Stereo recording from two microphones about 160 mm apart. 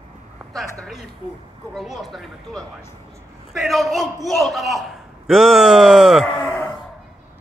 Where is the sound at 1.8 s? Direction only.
Centre (ahead or behind).